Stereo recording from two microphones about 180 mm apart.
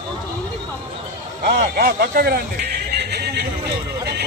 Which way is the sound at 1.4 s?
55° right (ahead or behind).